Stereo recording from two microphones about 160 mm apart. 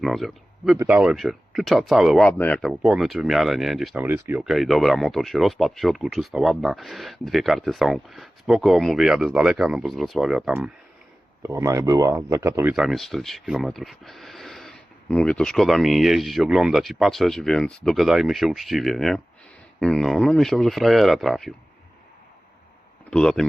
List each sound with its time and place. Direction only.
0.0 s speech: centre (ahead or behind)
4.4 s speech: centre (ahead or behind)
11.4 s speech: 20° right (ahead or behind)
12.7 s speech: centre (ahead or behind)
23.0 s speech: 5° left (ahead or behind)